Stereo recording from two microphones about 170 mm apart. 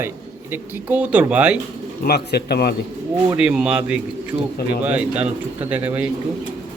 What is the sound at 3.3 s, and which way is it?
A man's voice, 5° right (ahead or behind).